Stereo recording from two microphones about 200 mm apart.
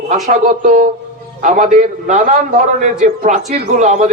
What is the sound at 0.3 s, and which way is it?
A man's voice, 40° right (ahead or behind).